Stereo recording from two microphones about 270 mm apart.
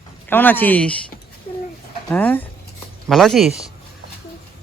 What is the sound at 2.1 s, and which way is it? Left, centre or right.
Speech, centre.